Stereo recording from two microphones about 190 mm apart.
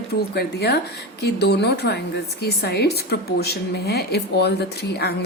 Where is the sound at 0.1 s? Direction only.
55° left (ahead or behind).